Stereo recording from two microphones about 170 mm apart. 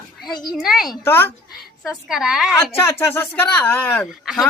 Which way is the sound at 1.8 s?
Centre (ahead or behind).